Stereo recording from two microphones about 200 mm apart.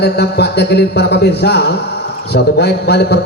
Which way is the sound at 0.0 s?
55° left (ahead or behind).